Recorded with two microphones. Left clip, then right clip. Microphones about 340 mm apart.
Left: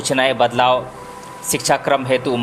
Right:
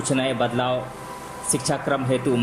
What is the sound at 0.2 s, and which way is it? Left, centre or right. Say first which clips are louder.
Speech: left 10 dB; centre.